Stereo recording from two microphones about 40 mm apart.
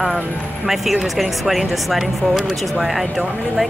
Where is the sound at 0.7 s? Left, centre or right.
Centre.